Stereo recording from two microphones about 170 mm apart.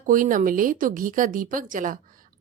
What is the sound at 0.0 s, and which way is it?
A woman's voice, 50° right (ahead or behind).